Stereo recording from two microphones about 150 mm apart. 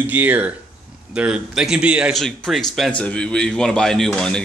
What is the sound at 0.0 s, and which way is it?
A man's voice, 10° right (ahead or behind).